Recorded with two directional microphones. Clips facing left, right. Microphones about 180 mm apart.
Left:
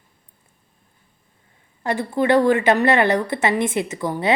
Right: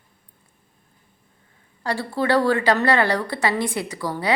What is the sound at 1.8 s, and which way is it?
A woman's voice, 20° left (ahead or behind).